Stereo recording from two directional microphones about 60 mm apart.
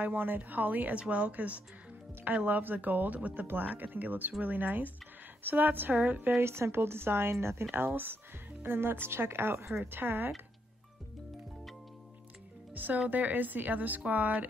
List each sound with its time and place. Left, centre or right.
0.0 s speech: right
6.4 s speech: right
12.7 s speech: right